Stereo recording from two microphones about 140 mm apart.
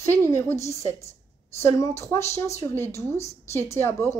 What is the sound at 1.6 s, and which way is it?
Speech, 20° left (ahead or behind).